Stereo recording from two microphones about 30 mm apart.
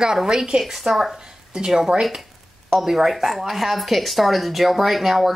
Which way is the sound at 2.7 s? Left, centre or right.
Centre.